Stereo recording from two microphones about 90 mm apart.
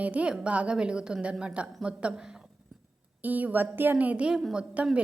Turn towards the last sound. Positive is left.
turn(degrees=-10)  # may be behind; listen again after turning